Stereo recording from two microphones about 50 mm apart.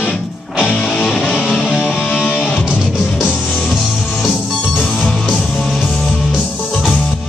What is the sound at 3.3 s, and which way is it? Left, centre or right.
Music, centre.